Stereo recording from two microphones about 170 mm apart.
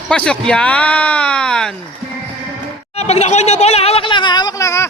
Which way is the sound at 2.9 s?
40° left (ahead or behind).